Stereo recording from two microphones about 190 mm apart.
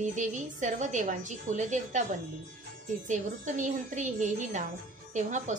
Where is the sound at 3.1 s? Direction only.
40° right (ahead or behind).